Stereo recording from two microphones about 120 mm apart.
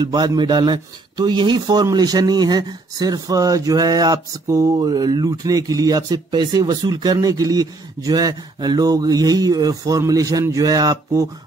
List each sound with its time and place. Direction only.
0.0 s speech: 35° right (ahead or behind)